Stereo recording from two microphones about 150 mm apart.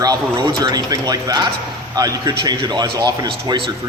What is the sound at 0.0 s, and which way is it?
A man's voice, 25° right (ahead or behind).